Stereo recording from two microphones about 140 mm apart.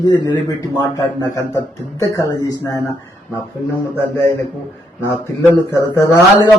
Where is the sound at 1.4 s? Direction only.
25° left (ahead or behind).